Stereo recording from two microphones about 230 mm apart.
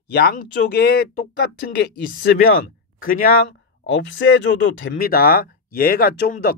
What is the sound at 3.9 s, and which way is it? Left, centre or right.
Speech, left.